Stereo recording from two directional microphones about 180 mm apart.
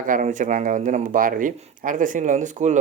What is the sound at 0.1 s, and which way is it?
A man's voice, 45° right (ahead or behind).